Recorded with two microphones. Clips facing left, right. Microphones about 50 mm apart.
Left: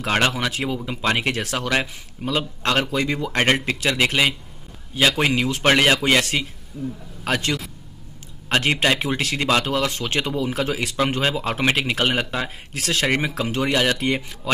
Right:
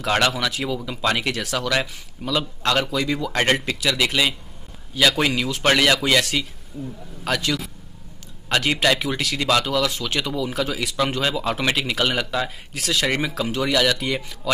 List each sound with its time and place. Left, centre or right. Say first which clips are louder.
0.0 s speech: even; left
3.8 s speech: left 2 dB; left
6.7 s a man's voice: left 3 dB; centre
7.2 s speech: even; left